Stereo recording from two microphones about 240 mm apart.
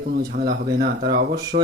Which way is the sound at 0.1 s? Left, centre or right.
Right.